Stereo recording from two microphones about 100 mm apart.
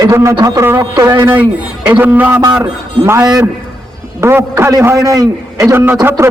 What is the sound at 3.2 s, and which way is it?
Speech, 40° right (ahead or behind).